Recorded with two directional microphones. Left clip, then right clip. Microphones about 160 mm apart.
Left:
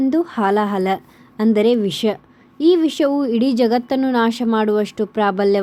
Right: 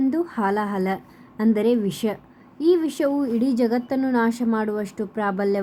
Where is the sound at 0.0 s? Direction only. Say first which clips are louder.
Left 5 dB; 25° left (ahead or behind).